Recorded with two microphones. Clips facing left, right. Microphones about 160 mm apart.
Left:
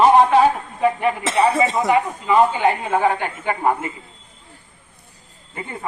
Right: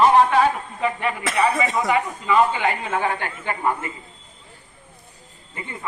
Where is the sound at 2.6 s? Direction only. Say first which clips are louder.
Left 5 dB; 15° left (ahead or behind).